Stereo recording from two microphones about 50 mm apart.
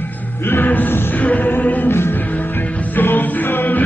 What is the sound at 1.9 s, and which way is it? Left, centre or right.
Music, left.